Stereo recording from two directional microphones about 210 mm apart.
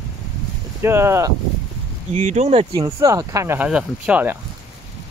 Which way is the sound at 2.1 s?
35° right (ahead or behind).